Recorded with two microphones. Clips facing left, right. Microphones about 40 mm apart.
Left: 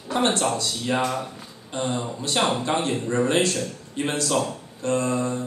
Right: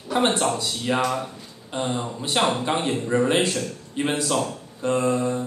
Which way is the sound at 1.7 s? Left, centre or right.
Centre.